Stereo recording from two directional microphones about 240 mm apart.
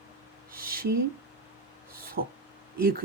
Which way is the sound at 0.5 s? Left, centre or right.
Right.